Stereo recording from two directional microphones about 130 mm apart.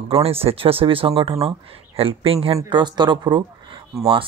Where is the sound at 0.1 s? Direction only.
50° right (ahead or behind).